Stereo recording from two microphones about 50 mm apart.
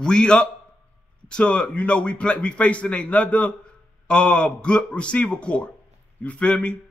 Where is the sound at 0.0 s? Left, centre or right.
Centre.